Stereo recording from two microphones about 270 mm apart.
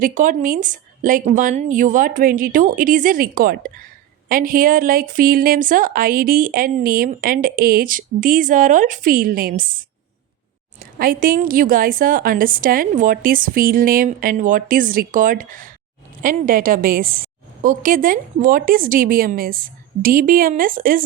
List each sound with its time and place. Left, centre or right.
0.0 s a woman's voice: right
10.8 s a woman's voice: right